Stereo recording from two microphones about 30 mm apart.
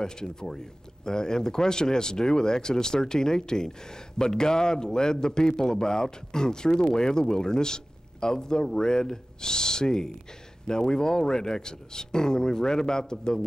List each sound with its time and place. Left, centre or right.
0.0 s a man's voice: left